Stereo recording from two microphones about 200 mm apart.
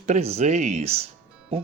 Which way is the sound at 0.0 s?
35° right (ahead or behind).